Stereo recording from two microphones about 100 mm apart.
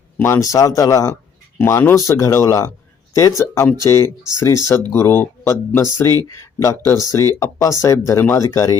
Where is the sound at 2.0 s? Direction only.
35° left (ahead or behind).